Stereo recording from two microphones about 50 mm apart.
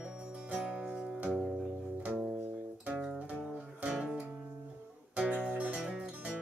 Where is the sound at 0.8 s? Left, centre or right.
Centre.